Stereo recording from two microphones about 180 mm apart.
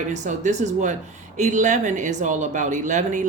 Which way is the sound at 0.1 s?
40° right (ahead or behind).